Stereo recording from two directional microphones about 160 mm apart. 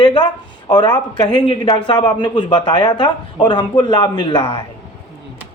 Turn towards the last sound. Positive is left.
turn(degrees=30)  # may be behind; listen again after turning